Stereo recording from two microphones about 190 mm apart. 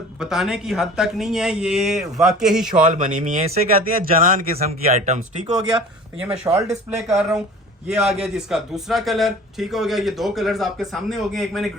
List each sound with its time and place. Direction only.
0.2 s a man's voice: 5° right (ahead or behind)
2.9 s speech: 40° right (ahead or behind)
6.1 s a man's voice: 5° right (ahead or behind)